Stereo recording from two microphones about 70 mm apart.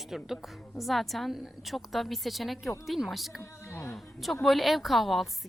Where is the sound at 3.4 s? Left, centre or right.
Left.